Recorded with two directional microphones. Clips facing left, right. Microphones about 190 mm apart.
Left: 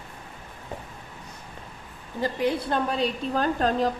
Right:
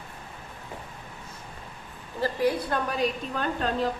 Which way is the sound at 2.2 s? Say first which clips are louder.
Even; 20° left (ahead or behind).